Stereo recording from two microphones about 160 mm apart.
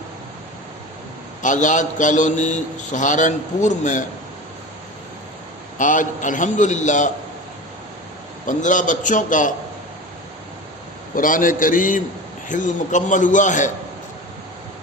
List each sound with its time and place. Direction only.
1.4 s a man's voice: 50° left (ahead or behind)
5.7 s a man's voice: 55° left (ahead or behind)
8.4 s a man's voice: 55° left (ahead or behind)
11.1 s a man's voice: 60° left (ahead or behind)